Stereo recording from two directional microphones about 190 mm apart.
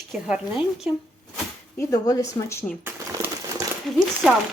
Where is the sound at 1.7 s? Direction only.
20° left (ahead or behind).